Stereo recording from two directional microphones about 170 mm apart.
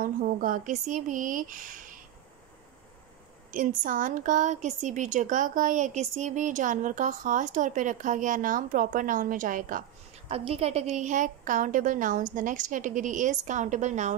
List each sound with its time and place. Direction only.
0.0 s a woman's voice: 55° right (ahead or behind)
3.5 s a woman's voice: 50° right (ahead or behind)
10.2 s a woman's voice: 35° right (ahead or behind)